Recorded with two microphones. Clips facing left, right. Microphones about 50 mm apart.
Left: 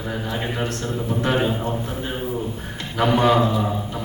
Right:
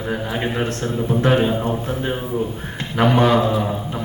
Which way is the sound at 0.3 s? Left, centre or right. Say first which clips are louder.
Right 3 dB; centre.